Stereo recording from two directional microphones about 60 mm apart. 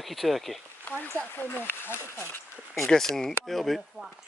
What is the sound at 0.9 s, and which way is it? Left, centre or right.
Speech, left.